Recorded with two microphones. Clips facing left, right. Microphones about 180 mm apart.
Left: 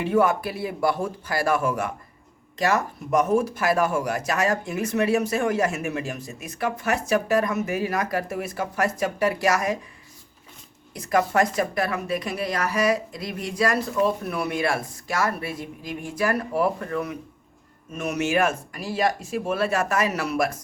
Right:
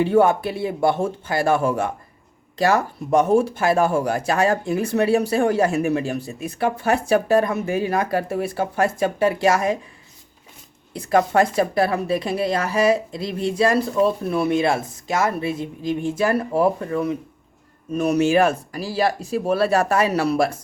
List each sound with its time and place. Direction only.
0.0 s speech: 30° right (ahead or behind)
10.9 s speech: 30° right (ahead or behind)